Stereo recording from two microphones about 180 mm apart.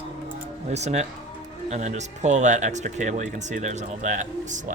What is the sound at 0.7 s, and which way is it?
Speech, 40° right (ahead or behind).